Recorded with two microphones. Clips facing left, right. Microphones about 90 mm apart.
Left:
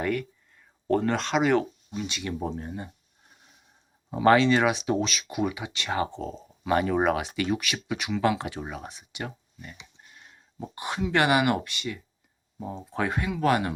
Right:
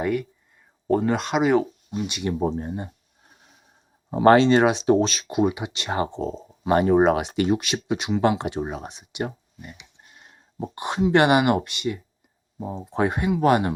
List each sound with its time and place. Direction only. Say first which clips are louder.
0.0 s speech: right 3 dB; 10° right (ahead or behind)
2.0 s speech: right 6 dB; 20° right (ahead or behind)
2.3 s speech: right 8 dB; 30° right (ahead or behind)
4.1 s speech: right 4 dB; 40° right (ahead or behind)